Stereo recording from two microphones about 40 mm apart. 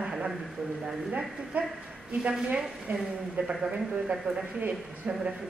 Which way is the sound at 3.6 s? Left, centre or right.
Right.